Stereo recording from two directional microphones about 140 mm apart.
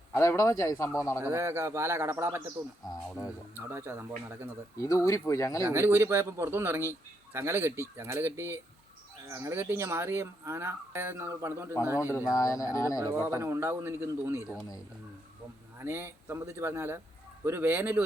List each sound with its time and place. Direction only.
0.1 s speech: 20° left (ahead or behind)
1.2 s speech: 20° right (ahead or behind)
3.1 s speech: 5° right (ahead or behind)
3.5 s speech: 15° right (ahead or behind)
4.8 s speech: 25° left (ahead or behind)
5.6 s speech: 20° right (ahead or behind)
11.9 s speech: 20° left (ahead or behind)
13.1 s speech: 20° right (ahead or behind)
15.8 s speech: 15° right (ahead or behind)